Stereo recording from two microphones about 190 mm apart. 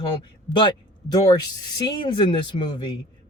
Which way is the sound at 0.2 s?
25° left (ahead or behind).